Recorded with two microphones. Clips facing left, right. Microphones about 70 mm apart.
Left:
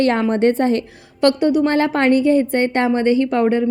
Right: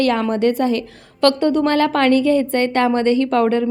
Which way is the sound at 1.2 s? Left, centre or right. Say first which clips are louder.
Even; centre.